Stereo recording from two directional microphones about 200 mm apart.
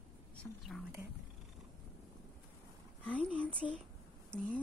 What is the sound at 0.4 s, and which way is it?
Speech, centre (ahead or behind).